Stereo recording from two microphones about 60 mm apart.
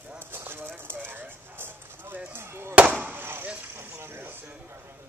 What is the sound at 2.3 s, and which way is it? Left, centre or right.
Chop, right.